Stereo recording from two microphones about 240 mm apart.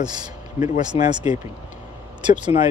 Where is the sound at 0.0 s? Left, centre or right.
Centre.